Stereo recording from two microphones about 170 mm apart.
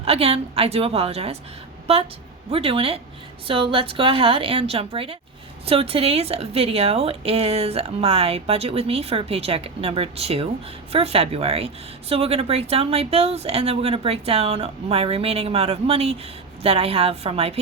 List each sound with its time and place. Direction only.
0.0 s a woman's voice: 35° right (ahead or behind)
2.5 s a woman's voice: 35° right (ahead or behind)